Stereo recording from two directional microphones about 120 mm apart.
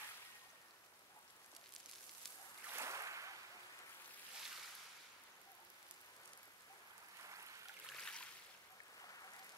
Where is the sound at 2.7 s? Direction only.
25° right (ahead or behind).